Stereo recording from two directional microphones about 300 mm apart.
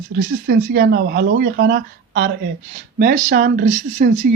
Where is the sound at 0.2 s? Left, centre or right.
Right.